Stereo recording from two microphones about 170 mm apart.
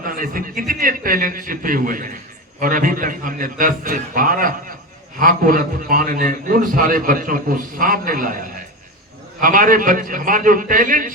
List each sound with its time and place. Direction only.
0.0 s a man's voice: 55° right (ahead or behind)
9.4 s a man's voice: 55° right (ahead or behind)